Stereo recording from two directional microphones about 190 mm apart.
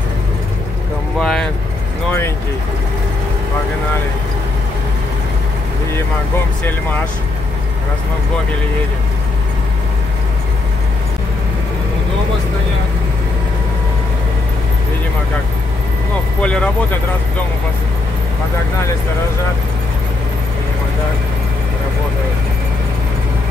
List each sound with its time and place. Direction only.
1.2 s vehicle: 5° left (ahead or behind)
16.4 s speech: 5° left (ahead or behind)